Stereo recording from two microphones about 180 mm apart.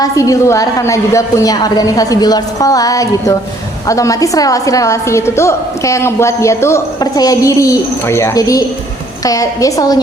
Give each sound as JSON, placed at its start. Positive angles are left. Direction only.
{"t": 0.0, "sound": "a woman's voice", "side_deg": 20}